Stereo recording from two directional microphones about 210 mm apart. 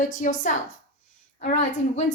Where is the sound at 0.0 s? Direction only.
40° left (ahead or behind).